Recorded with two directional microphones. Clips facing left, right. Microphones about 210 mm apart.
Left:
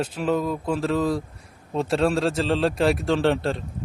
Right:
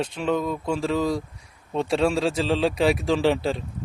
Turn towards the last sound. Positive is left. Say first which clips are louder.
# even
turn(degrees=0)  # may be behind; listen again after turning